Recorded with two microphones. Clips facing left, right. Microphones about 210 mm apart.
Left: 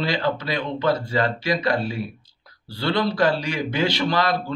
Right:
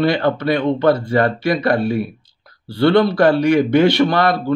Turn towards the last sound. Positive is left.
turn(degrees=-60)  # may be behind; listen again after turning